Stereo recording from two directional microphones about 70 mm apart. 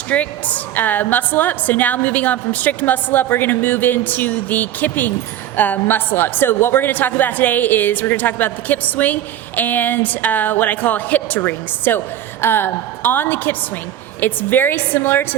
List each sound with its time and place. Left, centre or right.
0.1 s a woman's voice: left